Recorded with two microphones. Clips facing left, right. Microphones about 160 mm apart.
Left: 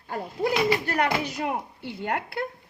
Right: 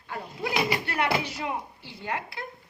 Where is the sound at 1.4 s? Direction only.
60° left (ahead or behind).